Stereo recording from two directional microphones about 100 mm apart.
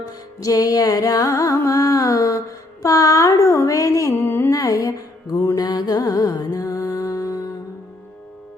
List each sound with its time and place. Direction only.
0.1 s music: 35° left (ahead or behind)
4.5 s music: 35° left (ahead or behind)